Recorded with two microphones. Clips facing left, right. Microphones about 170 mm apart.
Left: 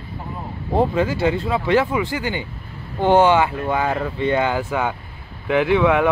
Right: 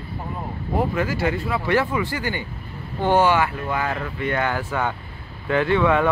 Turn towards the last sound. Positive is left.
turn(degrees=10)  # may be behind; listen again after turning